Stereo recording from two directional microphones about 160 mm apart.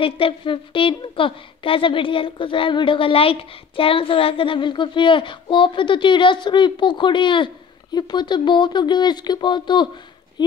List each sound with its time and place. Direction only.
0.0 s a woman's voice: 35° left (ahead or behind)